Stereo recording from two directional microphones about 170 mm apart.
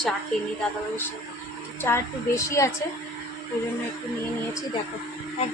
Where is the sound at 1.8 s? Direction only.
15° left (ahead or behind).